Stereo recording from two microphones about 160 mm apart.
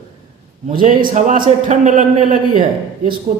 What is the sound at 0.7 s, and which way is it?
A man's voice, 60° right (ahead or behind).